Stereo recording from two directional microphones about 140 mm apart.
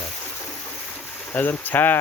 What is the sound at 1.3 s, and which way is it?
Speech, 15° left (ahead or behind).